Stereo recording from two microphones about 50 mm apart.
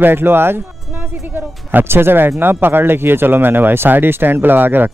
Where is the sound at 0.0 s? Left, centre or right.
Right.